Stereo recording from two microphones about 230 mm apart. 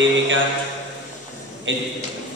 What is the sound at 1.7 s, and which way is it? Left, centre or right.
Speech, right.